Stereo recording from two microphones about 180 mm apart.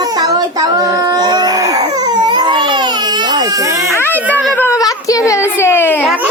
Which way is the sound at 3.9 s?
10° left (ahead or behind).